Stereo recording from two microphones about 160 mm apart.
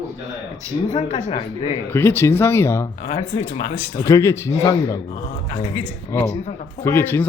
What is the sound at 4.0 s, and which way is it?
A man's voice, 20° left (ahead or behind).